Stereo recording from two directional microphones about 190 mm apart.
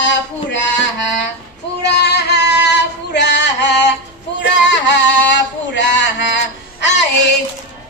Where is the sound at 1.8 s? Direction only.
60° left (ahead or behind).